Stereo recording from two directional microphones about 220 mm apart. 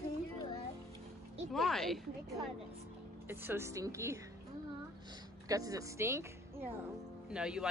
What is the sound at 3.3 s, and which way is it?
Speech, 10° right (ahead or behind).